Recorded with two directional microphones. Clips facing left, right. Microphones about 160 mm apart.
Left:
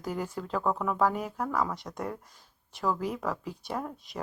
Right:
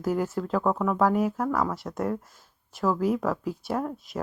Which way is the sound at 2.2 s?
45° right (ahead or behind).